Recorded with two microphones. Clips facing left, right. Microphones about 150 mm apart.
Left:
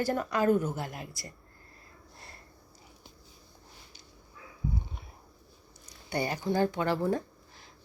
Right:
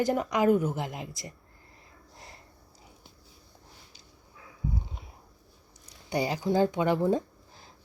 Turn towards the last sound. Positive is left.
turn(degrees=-20)  # may be behind; listen again after turning